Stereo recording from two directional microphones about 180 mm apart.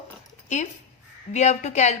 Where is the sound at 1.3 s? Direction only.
40° left (ahead or behind).